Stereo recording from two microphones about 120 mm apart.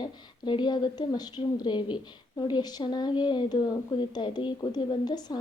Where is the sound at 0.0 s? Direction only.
40° left (ahead or behind).